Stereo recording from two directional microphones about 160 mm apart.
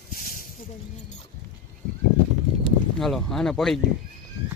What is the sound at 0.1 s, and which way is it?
Snake, 60° left (ahead or behind).